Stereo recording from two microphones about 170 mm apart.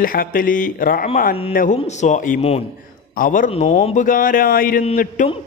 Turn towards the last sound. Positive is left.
turn(degrees=45)  # may be behind; listen again after turning